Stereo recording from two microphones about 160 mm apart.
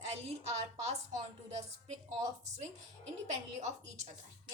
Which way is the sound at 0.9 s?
45° right (ahead or behind).